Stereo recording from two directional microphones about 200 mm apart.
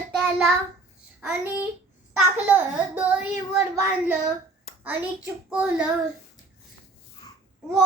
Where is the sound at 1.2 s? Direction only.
10° right (ahead or behind).